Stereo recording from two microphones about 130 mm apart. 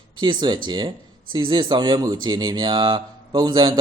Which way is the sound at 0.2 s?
35° right (ahead or behind).